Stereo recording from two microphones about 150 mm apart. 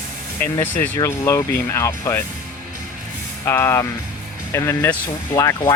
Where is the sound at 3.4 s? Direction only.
15° left (ahead or behind).